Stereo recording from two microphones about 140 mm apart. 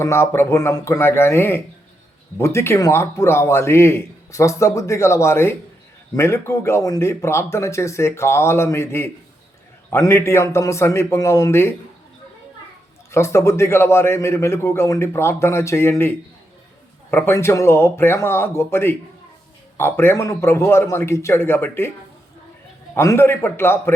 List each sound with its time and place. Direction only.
0.0 s a man's voice: 20° left (ahead or behind)
13.1 s a man's voice: 20° left (ahead or behind)
23.0 s a man's voice: 20° left (ahead or behind)